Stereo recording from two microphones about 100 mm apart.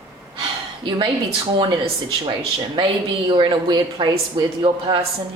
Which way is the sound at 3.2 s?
50° right (ahead or behind).